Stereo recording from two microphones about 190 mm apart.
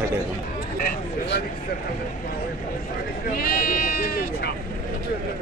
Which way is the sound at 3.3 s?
55° left (ahead or behind).